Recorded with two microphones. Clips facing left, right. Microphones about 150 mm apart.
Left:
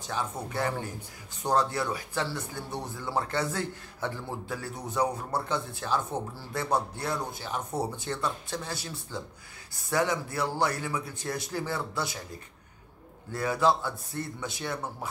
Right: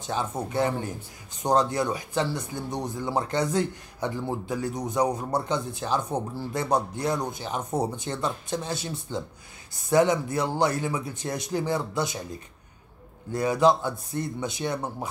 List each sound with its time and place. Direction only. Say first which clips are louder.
0.0 s speech: right 4 dB; 20° right (ahead or behind)
13.3 s speech: right 4 dB; 20° right (ahead or behind)